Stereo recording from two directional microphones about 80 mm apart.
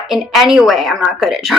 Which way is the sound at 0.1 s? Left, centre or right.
Centre.